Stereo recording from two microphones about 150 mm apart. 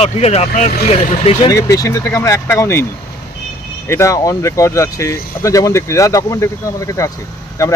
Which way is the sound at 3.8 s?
20° left (ahead or behind).